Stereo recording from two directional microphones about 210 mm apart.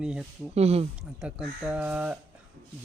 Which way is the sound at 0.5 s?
30° right (ahead or behind).